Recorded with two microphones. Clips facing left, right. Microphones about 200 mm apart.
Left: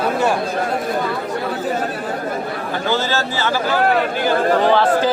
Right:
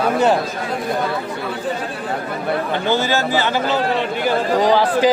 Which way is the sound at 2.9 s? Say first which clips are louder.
Right 3 dB; 15° right (ahead or behind).